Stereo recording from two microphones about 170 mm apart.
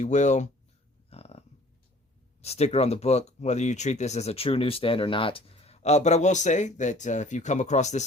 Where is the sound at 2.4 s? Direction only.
35° left (ahead or behind).